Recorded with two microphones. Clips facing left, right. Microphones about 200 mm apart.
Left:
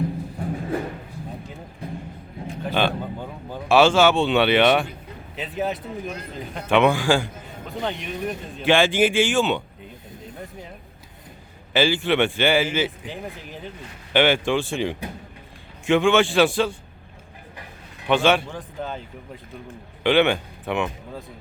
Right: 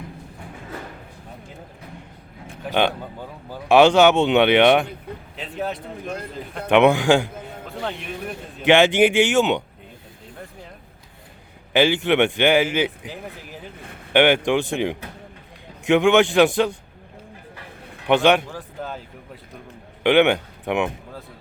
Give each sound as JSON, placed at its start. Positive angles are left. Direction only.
{"t": 0.4, "sound": "music", "side_deg": 40}
{"t": 2.6, "sound": "speech", "side_deg": -15}
{"t": 5.4, "sound": "speech", "side_deg": 0}
{"t": 6.7, "sound": "speech", "side_deg": -20}
{"t": 7.8, "sound": "speech", "side_deg": 0}
{"t": 8.6, "sound": "speech", "side_deg": -20}
{"t": 11.7, "sound": "speech", "side_deg": -20}
{"t": 13.1, "sound": "speech", "side_deg": -5}
{"t": 14.1, "sound": "speech", "side_deg": -15}
{"t": 18.1, "sound": "speech", "side_deg": -15}
{"t": 18.4, "sound": "speech", "side_deg": 0}
{"t": 20.0, "sound": "speech", "side_deg": -15}